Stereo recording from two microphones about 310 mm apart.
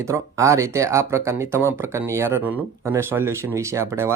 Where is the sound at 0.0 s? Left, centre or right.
Centre.